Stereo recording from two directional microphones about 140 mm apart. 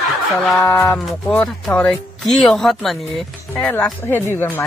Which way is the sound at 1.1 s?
5° left (ahead or behind).